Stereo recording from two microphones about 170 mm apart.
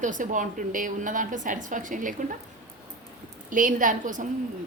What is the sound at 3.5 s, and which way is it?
Speech, 50° right (ahead or behind).